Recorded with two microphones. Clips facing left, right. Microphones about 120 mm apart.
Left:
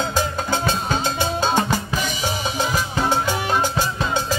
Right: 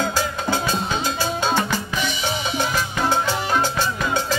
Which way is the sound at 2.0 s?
40° left (ahead or behind).